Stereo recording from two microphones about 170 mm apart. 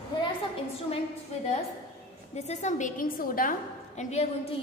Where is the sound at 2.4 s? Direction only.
45° left (ahead or behind).